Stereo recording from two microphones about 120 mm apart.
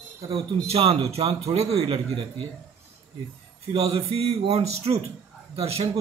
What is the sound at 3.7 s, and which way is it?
Speech, 55° right (ahead or behind).